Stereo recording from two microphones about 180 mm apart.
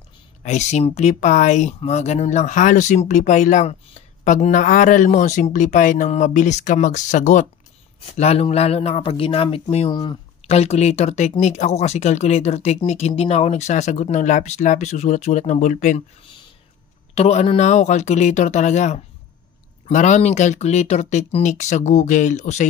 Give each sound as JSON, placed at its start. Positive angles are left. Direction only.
{"t": 0.4, "sound": "speech", "side_deg": 40}
{"t": 10.5, "sound": "speech", "side_deg": 35}
{"t": 17.1, "sound": "speech", "side_deg": 35}